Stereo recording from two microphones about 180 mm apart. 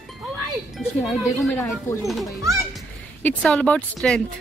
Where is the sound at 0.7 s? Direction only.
Centre (ahead or behind).